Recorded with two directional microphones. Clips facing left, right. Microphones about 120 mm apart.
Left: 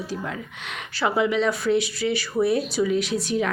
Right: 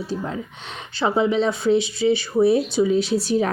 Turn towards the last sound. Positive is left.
turn(degrees=-30)  # may be behind; listen again after turning